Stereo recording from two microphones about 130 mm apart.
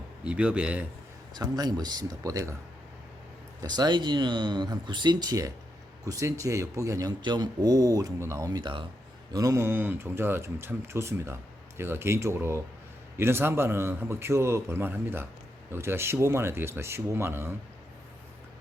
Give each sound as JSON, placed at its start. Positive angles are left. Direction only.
{"t": 0.3, "sound": "speech", "side_deg": -10}
{"t": 1.3, "sound": "speech", "side_deg": -30}
{"t": 3.6, "sound": "a man's voice", "side_deg": -30}
{"t": 9.3, "sound": "a man's voice", "side_deg": -25}